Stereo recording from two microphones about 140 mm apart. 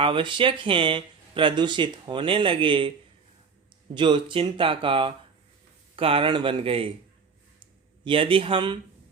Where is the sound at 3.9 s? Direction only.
35° right (ahead or behind).